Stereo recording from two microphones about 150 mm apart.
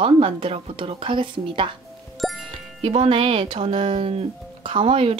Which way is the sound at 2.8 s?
40° right (ahead or behind).